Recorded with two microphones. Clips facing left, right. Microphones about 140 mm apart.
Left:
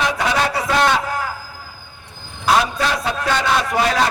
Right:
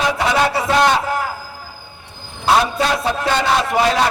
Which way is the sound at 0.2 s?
25° right (ahead or behind).